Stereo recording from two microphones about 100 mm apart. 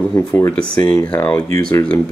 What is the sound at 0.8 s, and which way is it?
Speech, 15° left (ahead or behind).